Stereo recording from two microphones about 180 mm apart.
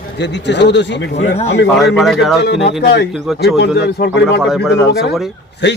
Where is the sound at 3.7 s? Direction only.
70° left (ahead or behind).